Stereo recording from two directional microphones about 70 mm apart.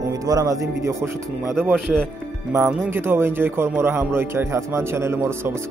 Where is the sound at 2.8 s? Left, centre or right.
Right.